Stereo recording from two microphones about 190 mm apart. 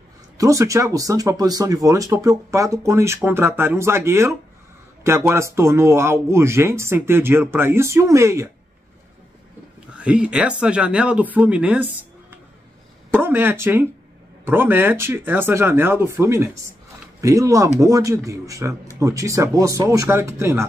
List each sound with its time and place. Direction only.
0.4 s speech: 15° right (ahead or behind)
9.9 s speech: 5° right (ahead or behind)